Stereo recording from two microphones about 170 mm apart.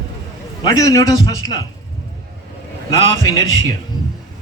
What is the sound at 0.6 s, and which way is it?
Speech, 20° left (ahead or behind).